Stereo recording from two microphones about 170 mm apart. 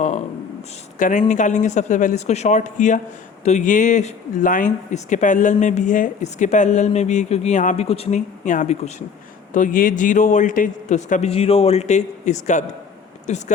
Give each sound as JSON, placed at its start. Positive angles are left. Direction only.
{"t": 0.9, "sound": "speech", "side_deg": 50}